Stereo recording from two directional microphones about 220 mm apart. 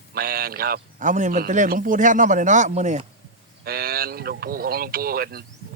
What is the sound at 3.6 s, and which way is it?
A man's voice, 45° right (ahead or behind).